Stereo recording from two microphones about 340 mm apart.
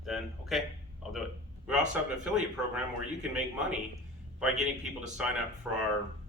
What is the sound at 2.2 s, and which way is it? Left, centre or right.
Speech, centre.